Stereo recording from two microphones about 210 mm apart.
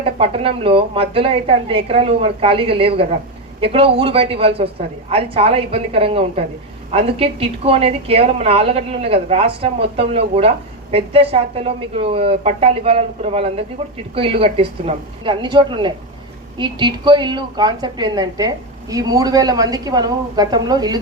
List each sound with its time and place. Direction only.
0.2 s a woman's voice: 25° right (ahead or behind)